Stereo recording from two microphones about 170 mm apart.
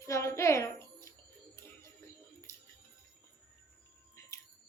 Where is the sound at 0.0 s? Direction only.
15° left (ahead or behind).